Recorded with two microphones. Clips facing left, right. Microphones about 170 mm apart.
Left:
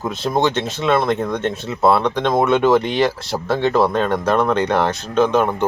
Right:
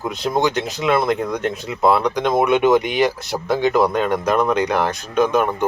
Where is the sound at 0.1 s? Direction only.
15° right (ahead or behind).